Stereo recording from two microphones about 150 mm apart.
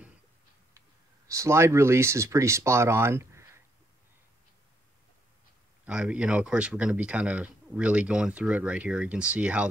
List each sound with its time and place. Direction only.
0.7 s speech: 20° right (ahead or behind)
5.9 s speech: 5° right (ahead or behind)